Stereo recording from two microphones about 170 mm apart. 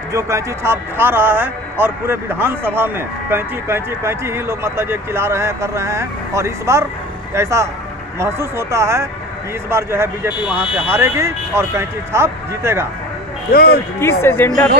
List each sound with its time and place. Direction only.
0.1 s a man's voice: 15° right (ahead or behind)
13.5 s speech: 65° left (ahead or behind)
13.9 s speech: 15° left (ahead or behind)